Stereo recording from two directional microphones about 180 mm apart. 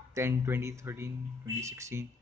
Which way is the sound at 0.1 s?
15° right (ahead or behind).